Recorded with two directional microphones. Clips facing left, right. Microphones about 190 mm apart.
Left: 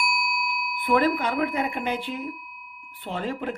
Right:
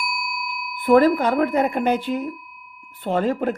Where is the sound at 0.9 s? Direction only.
45° right (ahead or behind).